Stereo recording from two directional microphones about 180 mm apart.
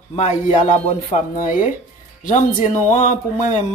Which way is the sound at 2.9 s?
45° left (ahead or behind).